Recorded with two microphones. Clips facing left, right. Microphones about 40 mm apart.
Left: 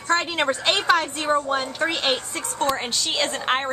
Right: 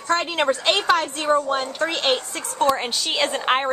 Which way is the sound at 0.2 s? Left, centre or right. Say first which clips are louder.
Right 2 dB; centre.